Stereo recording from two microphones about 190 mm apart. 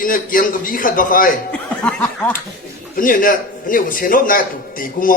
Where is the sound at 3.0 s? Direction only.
45° left (ahead or behind).